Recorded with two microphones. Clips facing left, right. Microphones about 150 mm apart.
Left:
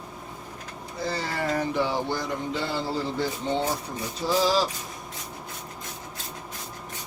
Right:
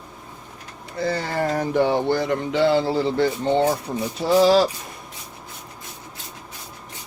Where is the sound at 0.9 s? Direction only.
60° right (ahead or behind).